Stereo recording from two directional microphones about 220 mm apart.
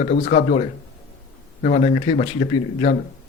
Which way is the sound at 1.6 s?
30° left (ahead or behind).